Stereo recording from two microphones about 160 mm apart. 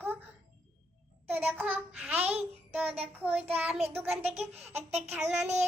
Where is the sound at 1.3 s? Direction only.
10° right (ahead or behind).